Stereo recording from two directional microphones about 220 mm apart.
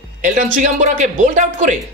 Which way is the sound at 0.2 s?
35° right (ahead or behind).